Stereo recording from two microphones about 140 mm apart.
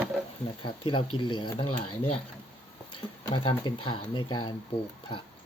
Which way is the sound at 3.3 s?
35° left (ahead or behind).